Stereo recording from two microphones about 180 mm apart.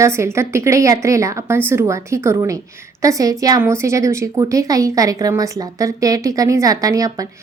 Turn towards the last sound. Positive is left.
turn(degrees=-20)  # may be behind; listen again after turning